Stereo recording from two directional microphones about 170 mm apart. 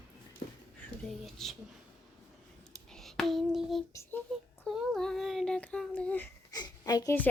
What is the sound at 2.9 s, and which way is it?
Child singing, 5° left (ahead or behind).